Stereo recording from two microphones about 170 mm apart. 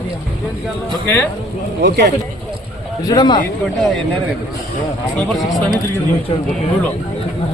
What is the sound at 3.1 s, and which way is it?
Speech, 25° left (ahead or behind).